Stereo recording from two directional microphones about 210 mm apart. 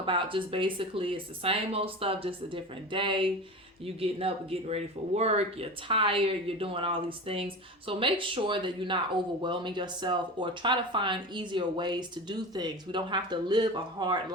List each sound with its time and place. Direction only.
0.0 s speech: 25° right (ahead or behind)